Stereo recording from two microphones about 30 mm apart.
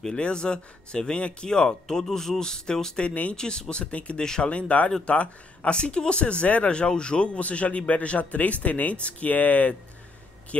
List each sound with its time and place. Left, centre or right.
0.1 s speech: left
4.4 s a man's voice: left
5.8 s speech: left
6.4 s speech: left
6.7 s speech: left
7.3 s a man's voice: left
8.2 s speech: left
10.5 s speech: left